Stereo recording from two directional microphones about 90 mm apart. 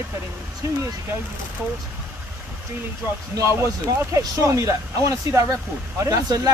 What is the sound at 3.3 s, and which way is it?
A man's voice, 35° right (ahead or behind).